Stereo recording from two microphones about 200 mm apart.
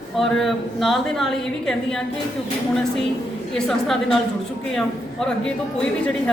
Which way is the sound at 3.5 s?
Centre (ahead or behind).